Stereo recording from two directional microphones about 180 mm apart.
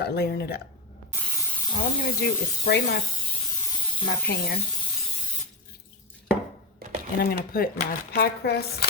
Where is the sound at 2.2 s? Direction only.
65° left (ahead or behind).